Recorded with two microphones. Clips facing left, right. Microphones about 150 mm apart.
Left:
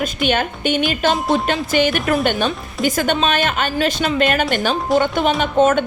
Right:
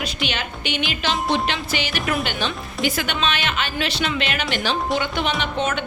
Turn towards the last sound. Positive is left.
turn(degrees=45)  # may be behind; listen again after turning